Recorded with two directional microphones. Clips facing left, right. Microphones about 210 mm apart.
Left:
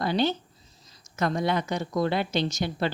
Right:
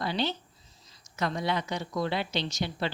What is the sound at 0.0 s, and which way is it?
A woman's voice, 50° left (ahead or behind).